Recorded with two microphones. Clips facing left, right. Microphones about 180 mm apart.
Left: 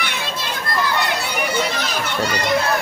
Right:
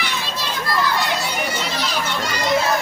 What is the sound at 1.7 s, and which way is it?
Children playing, 50° left (ahead or behind).